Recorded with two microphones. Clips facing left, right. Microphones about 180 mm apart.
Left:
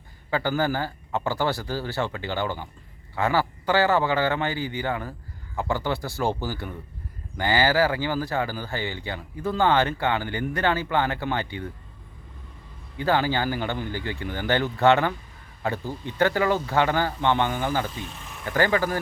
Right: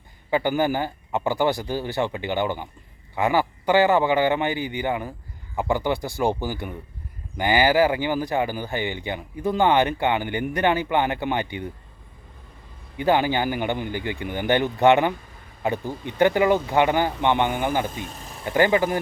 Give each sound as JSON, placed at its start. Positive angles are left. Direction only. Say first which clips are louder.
{"t": 0.3, "sound": "speech", "louder": "right 3 dB", "side_deg": -15}
{"t": 13.0, "sound": "speech", "louder": "right 3 dB", "side_deg": -15}
{"t": 17.8, "sound": "speech", "louder": "right 3 dB", "side_deg": -45}
{"t": 18.5, "sound": "speech", "louder": "right 3 dB", "side_deg": -20}